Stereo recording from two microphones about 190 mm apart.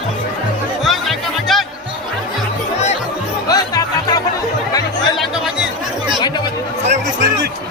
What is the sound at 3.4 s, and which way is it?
Music, 20° left (ahead or behind).